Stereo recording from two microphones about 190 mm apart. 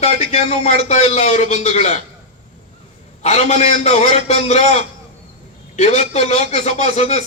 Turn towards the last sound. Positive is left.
turn(degrees=35)  # may be behind; listen again after turning